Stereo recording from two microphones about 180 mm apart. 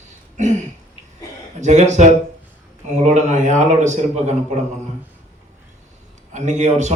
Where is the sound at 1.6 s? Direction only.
40° right (ahead or behind).